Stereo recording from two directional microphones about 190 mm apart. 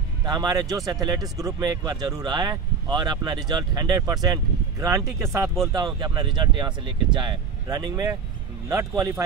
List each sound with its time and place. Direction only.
0.2 s speech: 20° right (ahead or behind)